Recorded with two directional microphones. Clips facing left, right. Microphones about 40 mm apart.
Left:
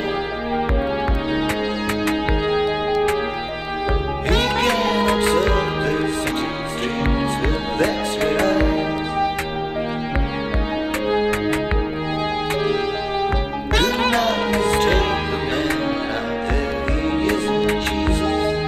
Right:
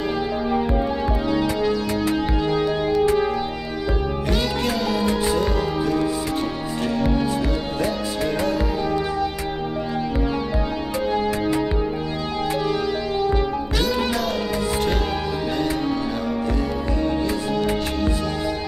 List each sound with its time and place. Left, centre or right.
4.3 s music: left
11.1 s music: left
13.7 s music: left